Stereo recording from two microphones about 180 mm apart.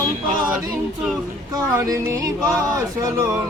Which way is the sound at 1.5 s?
20° right (ahead or behind).